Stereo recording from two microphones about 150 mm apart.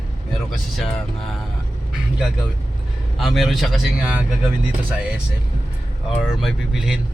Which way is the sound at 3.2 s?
Centre (ahead or behind).